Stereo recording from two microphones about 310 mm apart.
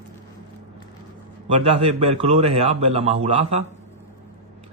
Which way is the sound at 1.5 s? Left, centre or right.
Centre.